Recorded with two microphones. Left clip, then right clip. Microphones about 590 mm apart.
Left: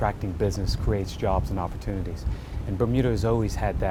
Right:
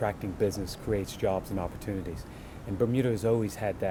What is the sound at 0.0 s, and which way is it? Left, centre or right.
Speech, left.